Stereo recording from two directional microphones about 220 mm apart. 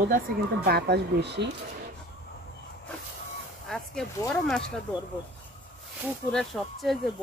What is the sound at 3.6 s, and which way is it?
Speech, centre (ahead or behind).